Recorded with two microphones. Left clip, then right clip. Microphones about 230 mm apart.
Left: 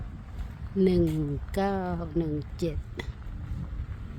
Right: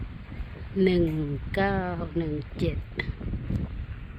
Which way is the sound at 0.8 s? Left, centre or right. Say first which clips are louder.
Right 1 dB; centre.